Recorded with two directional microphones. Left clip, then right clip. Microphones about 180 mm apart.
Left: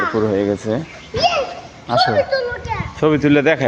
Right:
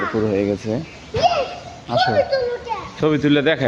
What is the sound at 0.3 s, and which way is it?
Speech, 5° left (ahead or behind).